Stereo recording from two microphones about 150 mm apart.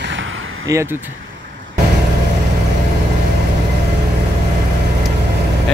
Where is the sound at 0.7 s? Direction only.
20° right (ahead or behind).